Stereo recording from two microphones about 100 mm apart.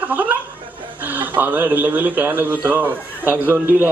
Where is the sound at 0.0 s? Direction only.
15° right (ahead or behind).